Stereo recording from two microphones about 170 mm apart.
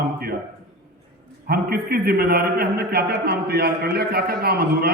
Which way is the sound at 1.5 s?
65° right (ahead or behind).